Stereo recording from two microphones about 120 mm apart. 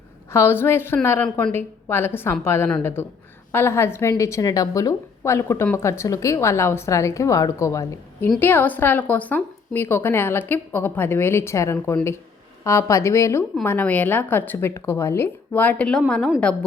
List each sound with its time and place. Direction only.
0.3 s a woman's voice: 20° left (ahead or behind)
13.7 s a woman's voice: 15° left (ahead or behind)